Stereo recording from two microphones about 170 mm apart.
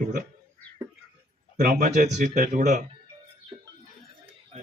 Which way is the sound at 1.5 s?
55° right (ahead or behind).